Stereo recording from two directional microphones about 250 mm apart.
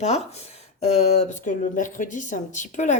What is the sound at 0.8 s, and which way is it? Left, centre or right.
A woman's voice, left.